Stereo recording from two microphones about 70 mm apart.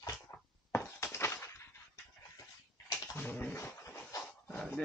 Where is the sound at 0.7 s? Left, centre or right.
Left.